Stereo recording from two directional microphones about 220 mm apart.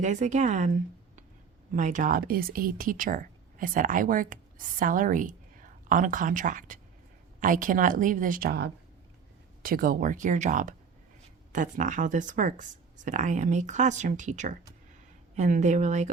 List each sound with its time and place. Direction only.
0.0 s speech: 35° right (ahead or behind)